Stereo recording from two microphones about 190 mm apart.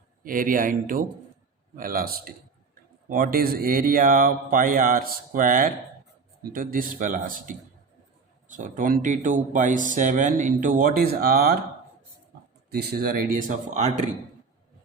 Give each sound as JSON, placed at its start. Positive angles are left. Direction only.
{"t": 0.3, "sound": "speech", "side_deg": -45}
{"t": 12.7, "sound": "speech", "side_deg": -55}